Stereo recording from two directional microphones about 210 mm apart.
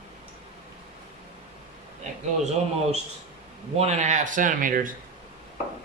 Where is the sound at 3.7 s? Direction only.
30° right (ahead or behind).